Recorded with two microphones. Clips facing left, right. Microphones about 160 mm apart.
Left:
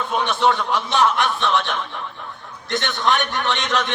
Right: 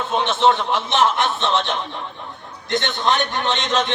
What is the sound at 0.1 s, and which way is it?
Speech, 25° right (ahead or behind).